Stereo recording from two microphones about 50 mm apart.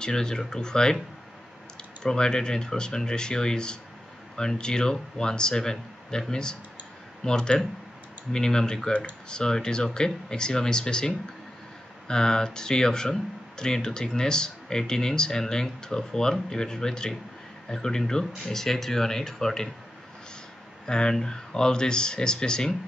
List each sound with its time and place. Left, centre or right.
0.0 s speech: centre
2.0 s speech: centre
20.8 s speech: centre